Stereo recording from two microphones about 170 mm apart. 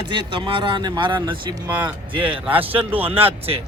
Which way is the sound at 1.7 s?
10° right (ahead or behind).